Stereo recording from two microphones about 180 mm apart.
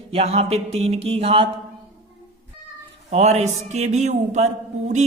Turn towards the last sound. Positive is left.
turn(degrees=-40)  # may be behind; listen again after turning